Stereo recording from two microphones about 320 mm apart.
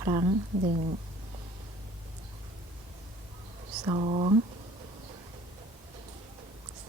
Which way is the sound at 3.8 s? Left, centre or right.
Centre.